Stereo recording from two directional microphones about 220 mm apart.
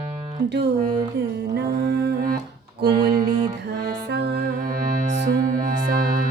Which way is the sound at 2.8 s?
45° right (ahead or behind).